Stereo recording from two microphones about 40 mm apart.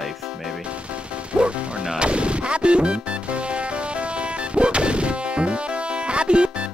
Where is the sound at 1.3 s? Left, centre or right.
Right.